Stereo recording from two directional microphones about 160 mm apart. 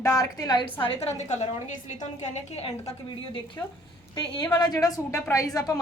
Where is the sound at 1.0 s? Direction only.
45° left (ahead or behind).